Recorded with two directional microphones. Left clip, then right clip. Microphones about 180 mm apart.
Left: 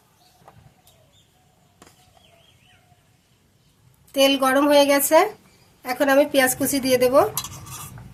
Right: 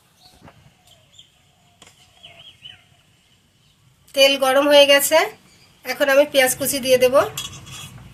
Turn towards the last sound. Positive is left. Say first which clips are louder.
# right 2 dB
turn(degrees=60)  # may be behind; listen again after turning